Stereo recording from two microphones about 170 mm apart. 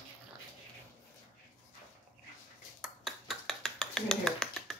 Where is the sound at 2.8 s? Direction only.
Centre (ahead or behind).